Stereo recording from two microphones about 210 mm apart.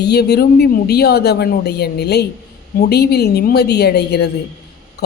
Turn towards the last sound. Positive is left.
turn(degrees=50)  # may be behind; listen again after turning